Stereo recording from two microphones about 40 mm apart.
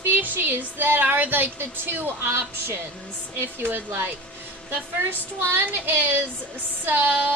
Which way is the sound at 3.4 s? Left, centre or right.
Right.